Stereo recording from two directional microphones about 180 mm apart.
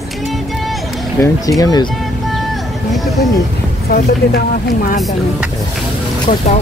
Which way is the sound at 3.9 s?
55° left (ahead or behind).